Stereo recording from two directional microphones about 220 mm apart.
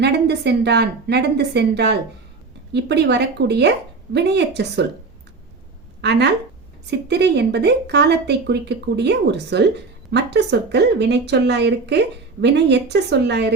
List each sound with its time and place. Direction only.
0.0 s speech: 50° right (ahead or behind)
6.0 s a woman's voice: 50° right (ahead or behind)